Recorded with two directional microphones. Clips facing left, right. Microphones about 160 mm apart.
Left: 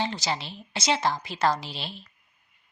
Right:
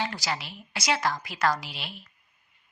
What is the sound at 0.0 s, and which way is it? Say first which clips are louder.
Speech: left 2 dB; 25° left (ahead or behind).